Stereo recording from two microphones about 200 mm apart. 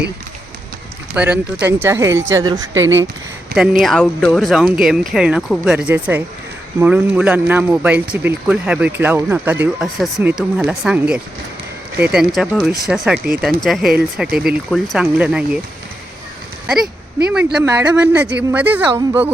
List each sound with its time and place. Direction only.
1.1 s speech: 5° right (ahead or behind)
3.5 s speech: centre (ahead or behind)
16.6 s speech: centre (ahead or behind)